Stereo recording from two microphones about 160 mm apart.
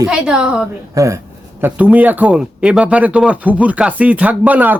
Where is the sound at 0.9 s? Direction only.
20° right (ahead or behind).